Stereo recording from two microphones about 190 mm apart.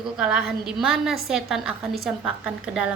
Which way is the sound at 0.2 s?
5° right (ahead or behind).